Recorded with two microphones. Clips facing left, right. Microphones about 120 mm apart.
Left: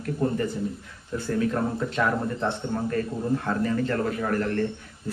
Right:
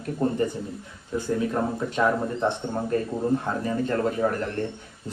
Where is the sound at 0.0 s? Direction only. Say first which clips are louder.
Right 1 dB; 25° right (ahead or behind).